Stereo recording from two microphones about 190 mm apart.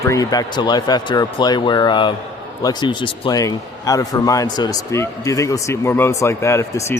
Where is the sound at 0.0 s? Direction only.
15° left (ahead or behind).